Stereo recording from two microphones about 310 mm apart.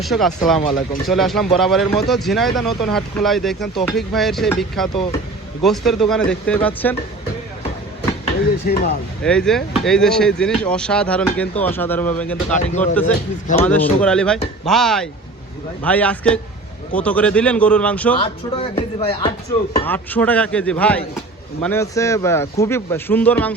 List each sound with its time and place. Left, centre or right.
0.0 s speech: centre
8.6 s speech: left
9.2 s speech: centre
13.7 s speech: centre
18.2 s speech: centre
19.7 s speech: centre